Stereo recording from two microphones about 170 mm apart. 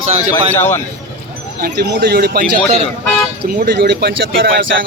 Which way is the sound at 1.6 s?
60° right (ahead or behind).